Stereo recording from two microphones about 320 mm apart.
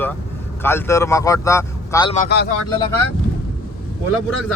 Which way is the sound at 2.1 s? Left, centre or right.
Left.